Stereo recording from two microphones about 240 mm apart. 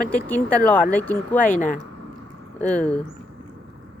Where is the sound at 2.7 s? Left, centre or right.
Centre.